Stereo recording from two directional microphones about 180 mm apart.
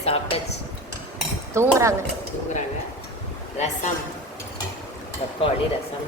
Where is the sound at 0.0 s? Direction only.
35° left (ahead or behind).